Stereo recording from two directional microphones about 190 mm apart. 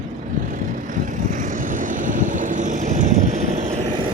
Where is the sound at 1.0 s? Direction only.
45° right (ahead or behind).